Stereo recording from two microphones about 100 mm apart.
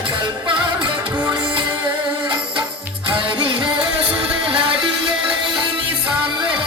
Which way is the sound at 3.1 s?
55° right (ahead or behind).